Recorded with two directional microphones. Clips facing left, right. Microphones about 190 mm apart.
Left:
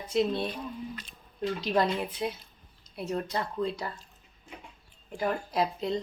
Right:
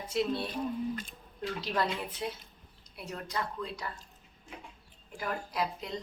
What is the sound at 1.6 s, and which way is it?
Speech, 15° left (ahead or behind).